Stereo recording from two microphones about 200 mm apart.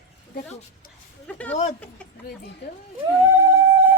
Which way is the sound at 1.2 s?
5° left (ahead or behind).